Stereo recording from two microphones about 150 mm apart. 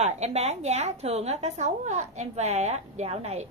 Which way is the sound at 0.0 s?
45° right (ahead or behind).